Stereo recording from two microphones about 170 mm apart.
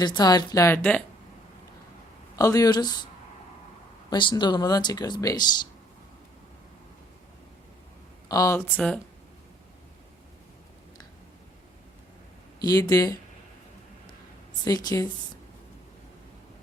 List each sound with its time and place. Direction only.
0.0 s speech: 25° left (ahead or behind)
2.3 s speech: 20° left (ahead or behind)
4.1 s speech: 25° left (ahead or behind)
8.3 s speech: 20° left (ahead or behind)
12.5 s speech: 20° left (ahead or behind)
14.6 s speech: 25° left (ahead or behind)